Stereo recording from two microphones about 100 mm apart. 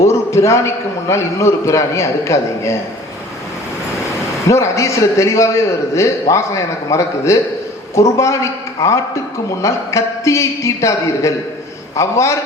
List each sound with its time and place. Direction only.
0.0 s a man's voice: 30° left (ahead or behind)
4.4 s a man's voice: 30° left (ahead or behind)